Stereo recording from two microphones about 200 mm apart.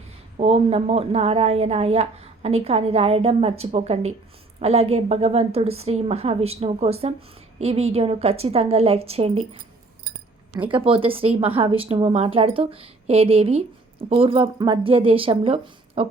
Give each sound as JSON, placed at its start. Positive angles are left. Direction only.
{"t": 0.3, "sound": "a woman's voice", "side_deg": -30}
{"t": 10.7, "sound": "a woman's voice", "side_deg": -25}